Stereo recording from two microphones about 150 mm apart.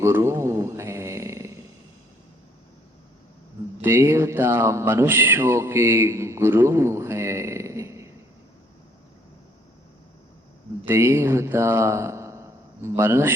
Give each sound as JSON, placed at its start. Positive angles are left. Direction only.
{"t": 0.0, "sound": "mantra", "side_deg": -20}
{"t": 3.8, "sound": "speech", "side_deg": -15}
{"t": 10.8, "sound": "speech", "side_deg": -15}